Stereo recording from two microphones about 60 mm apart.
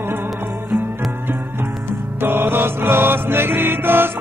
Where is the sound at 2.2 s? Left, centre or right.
Right.